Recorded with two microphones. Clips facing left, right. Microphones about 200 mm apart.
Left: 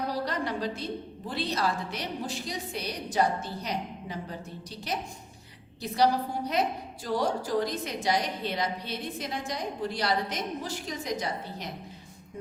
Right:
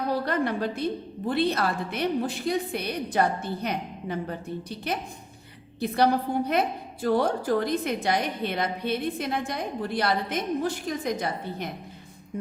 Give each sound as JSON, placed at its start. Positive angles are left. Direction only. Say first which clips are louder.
{"t": 0.1, "sound": "a sound", "louder": "right 5 dB", "side_deg": -55}
{"t": 1.3, "sound": "a woman's voice", "louder": "right 5 dB", "side_deg": -55}
{"t": 5.8, "sound": "a woman's voice", "louder": "right 3 dB", "side_deg": -55}